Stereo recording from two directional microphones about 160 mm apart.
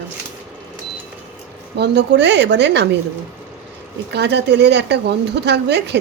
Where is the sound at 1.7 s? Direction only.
90° right.